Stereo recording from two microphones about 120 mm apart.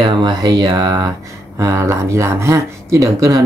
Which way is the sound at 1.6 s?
25° right (ahead or behind).